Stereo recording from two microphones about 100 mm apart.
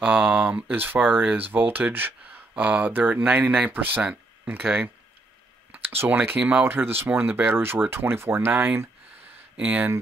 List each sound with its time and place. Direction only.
0.0 s speech: 15° right (ahead or behind)